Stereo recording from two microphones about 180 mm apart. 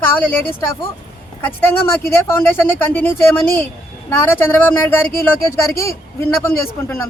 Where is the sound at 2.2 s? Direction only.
10° left (ahead or behind).